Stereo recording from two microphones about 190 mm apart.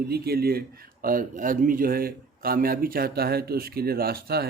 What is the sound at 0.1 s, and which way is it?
A man's voice, 55° right (ahead or behind).